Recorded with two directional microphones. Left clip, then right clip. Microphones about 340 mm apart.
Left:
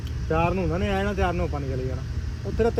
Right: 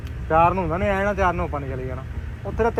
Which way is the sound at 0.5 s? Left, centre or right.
Right.